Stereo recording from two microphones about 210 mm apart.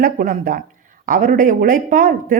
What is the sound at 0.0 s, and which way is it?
A woman's voice, 40° right (ahead or behind).